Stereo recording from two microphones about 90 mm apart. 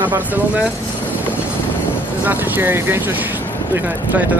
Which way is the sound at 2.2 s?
20° right (ahead or behind).